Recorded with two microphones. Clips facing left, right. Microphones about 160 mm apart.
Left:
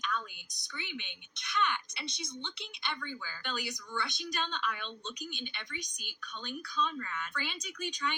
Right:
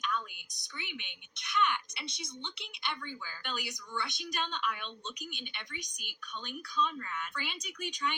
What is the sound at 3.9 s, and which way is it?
Speech, 5° right (ahead or behind).